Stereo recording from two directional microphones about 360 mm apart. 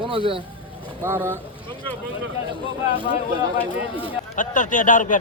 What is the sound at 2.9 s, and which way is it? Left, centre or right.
Speech, left.